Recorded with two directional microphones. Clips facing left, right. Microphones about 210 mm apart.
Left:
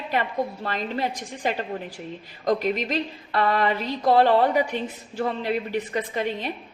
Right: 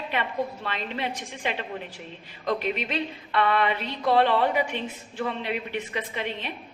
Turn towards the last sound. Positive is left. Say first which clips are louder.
# left 5 dB
turn(degrees=40)  # may be behind; listen again after turning